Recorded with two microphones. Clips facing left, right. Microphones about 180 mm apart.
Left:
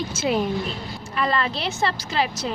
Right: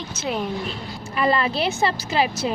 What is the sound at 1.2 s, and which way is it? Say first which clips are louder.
A woman's voice: right 3 dB; 10° right (ahead or behind).